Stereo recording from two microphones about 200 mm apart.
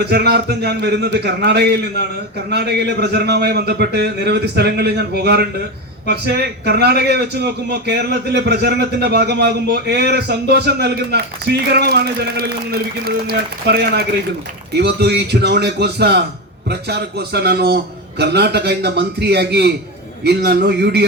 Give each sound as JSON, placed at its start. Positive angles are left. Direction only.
{"t": 0.0, "sound": "a man's voice", "side_deg": -55}